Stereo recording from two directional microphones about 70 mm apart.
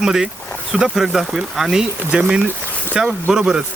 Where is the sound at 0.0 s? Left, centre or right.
Centre.